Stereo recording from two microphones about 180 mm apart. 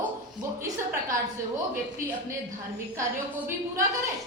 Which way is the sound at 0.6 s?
20° right (ahead or behind).